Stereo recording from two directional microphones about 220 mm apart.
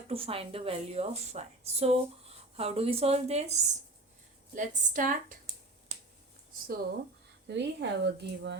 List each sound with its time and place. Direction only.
0.1 s a woman's voice: 25° right (ahead or behind)
7.4 s speech: 50° right (ahead or behind)